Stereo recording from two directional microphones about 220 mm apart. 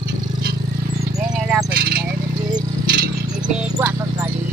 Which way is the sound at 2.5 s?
40° right (ahead or behind).